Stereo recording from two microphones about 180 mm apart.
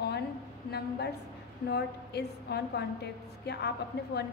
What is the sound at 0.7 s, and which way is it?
A woman's voice, 65° left (ahead or behind).